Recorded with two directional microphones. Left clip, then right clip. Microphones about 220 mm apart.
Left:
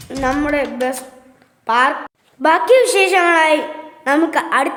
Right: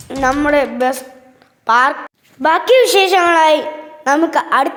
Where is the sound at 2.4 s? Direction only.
15° right (ahead or behind).